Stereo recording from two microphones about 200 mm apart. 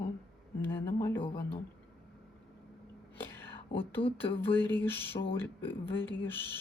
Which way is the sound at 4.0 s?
25° left (ahead or behind).